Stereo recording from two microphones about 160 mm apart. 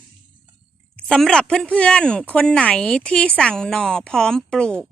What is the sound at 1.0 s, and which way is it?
Speech, 5° left (ahead or behind).